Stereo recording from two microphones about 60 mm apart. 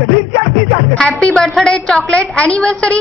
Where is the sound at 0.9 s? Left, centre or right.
Centre.